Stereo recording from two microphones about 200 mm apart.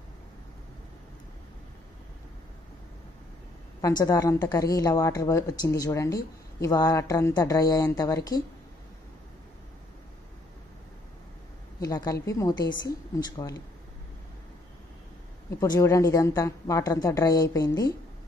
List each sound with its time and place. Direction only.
3.8 s a woman's voice: 15° left (ahead or behind)
11.8 s a woman's voice: 15° left (ahead or behind)
15.6 s a woman's voice: 15° left (ahead or behind)